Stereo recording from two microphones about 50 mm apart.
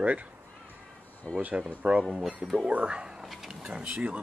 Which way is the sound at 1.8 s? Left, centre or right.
Right.